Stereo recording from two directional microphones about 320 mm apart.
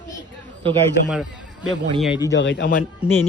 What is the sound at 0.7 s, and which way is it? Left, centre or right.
Speech, centre.